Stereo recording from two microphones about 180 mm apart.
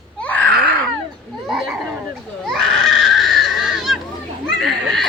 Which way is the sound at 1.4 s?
Centre (ahead or behind).